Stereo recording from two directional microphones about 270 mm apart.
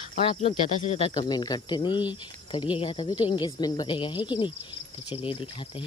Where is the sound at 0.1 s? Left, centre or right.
Left.